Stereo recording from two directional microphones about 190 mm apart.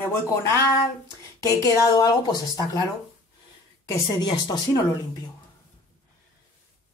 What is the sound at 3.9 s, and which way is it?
Speech, 20° left (ahead or behind).